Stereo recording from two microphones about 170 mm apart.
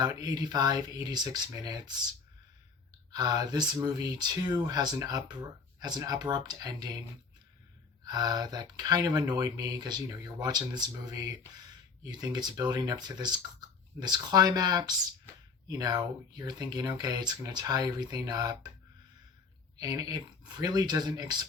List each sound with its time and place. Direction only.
0.0 s speech: 20° right (ahead or behind)
3.1 s speech: 20° right (ahead or behind)
8.0 s speech: 25° right (ahead or behind)
19.7 s speech: 20° right (ahead or behind)